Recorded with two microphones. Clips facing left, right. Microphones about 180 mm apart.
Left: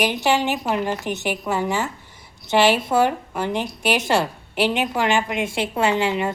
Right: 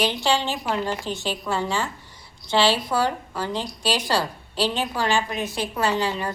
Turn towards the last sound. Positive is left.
turn(degrees=20)  # may be behind; listen again after turning